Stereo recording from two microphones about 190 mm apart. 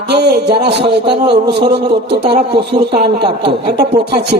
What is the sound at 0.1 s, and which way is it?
A man's voice, 60° right (ahead or behind).